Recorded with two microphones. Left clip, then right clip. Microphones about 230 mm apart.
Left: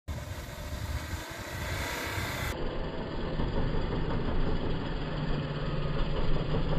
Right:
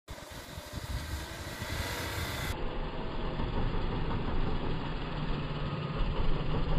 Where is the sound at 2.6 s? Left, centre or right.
Right.